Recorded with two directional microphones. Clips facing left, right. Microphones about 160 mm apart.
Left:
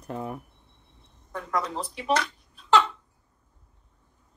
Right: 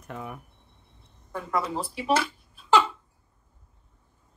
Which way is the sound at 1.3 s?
5° right (ahead or behind).